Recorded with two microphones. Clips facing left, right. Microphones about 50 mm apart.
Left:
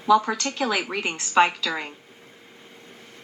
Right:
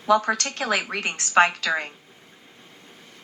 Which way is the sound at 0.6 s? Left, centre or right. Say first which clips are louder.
Even; right.